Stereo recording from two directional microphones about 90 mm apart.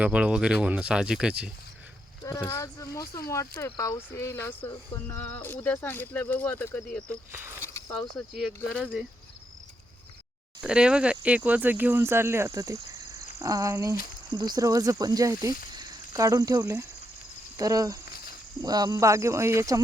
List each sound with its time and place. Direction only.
0.0 s speech: 15° right (ahead or behind)
2.2 s speech: 40° left (ahead or behind); by 6.7 s 20° left (ahead or behind)
7.3 s speech: 25° right (ahead or behind)
7.6 s a sound: 30° left (ahead or behind)
7.9 s cricket: centre (ahead or behind)
8.8 s speech: 10° right (ahead or behind)
10.6 s speech: 10° right (ahead or behind); by 13.9 s 35° right (ahead or behind)
14.3 s speech: 50° right (ahead or behind)